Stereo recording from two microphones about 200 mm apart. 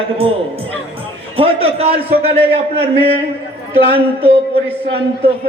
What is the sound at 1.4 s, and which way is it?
A man's voice, 30° right (ahead or behind).